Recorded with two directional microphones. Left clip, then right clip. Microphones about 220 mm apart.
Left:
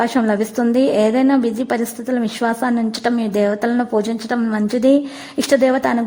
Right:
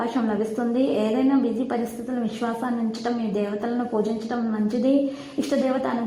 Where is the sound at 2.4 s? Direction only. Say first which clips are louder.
Left 9 dB; 40° left (ahead or behind).